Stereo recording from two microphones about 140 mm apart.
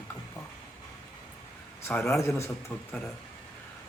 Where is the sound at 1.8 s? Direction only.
15° left (ahead or behind).